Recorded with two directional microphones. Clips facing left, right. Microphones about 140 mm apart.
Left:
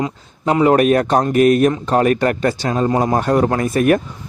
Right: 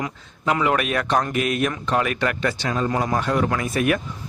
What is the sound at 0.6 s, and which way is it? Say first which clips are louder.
A man's voice: left 13 dB; 40° left (ahead or behind).